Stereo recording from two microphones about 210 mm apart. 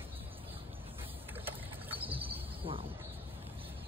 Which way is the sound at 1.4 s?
10° right (ahead or behind).